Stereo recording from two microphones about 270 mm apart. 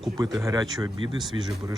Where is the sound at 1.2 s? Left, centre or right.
Centre.